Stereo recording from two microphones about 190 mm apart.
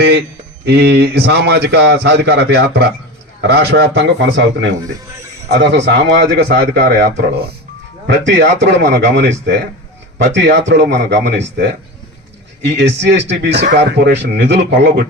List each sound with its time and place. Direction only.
0.0 s speech: 60° right (ahead or behind)
5.5 s speech: 60° right (ahead or behind)
12.6 s speech: 65° right (ahead or behind)